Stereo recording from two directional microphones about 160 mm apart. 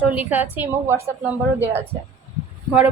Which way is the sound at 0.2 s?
10° right (ahead or behind).